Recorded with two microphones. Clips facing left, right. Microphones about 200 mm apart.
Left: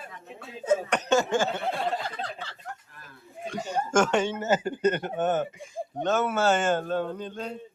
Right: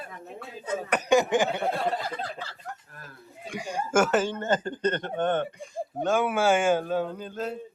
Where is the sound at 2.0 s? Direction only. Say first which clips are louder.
Right 1 dB; 5° right (ahead or behind).